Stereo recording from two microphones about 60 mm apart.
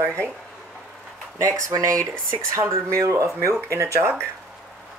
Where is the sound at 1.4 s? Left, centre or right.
Right.